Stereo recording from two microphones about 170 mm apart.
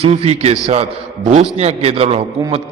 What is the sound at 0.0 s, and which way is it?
A man's voice, 40° right (ahead or behind).